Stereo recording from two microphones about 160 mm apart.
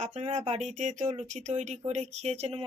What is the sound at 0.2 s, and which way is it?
A woman's voice, 45° right (ahead or behind).